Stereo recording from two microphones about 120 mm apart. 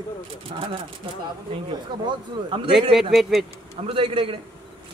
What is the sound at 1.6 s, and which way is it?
Speech, 40° right (ahead or behind).